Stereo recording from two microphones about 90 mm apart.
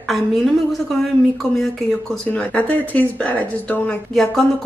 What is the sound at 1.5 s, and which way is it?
Speech, centre (ahead or behind).